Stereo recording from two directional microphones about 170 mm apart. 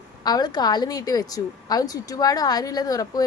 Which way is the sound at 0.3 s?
25° left (ahead or behind).